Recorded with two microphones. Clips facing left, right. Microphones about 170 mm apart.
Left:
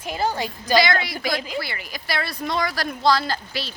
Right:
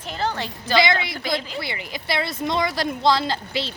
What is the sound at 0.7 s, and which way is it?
Speech, 20° right (ahead or behind).